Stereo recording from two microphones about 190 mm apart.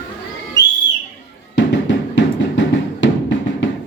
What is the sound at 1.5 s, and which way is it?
Music, 75° left (ahead or behind).